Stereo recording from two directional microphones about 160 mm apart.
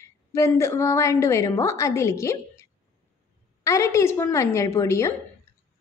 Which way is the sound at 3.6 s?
20° left (ahead or behind).